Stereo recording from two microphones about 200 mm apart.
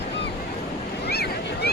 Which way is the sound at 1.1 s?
55° left (ahead or behind).